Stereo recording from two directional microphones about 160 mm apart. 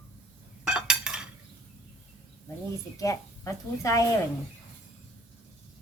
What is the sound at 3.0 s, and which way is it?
Speech, 20° left (ahead or behind).